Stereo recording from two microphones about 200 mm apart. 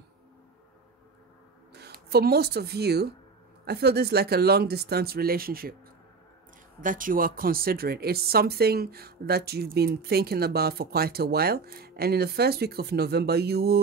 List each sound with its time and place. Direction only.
1.7 s speech: 55° right (ahead or behind)
6.8 s speech: 40° right (ahead or behind)